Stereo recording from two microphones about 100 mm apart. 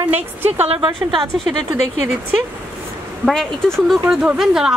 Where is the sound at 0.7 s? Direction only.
55° right (ahead or behind).